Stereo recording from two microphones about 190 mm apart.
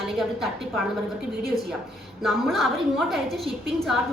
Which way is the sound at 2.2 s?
Centre (ahead or behind).